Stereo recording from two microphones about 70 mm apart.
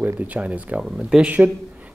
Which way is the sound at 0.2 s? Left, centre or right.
Centre.